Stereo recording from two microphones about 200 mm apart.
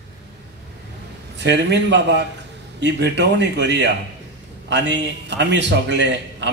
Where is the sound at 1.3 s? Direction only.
60° right (ahead or behind).